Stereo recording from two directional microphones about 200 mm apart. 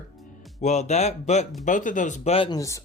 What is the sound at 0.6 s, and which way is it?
Speech, 35° left (ahead or behind).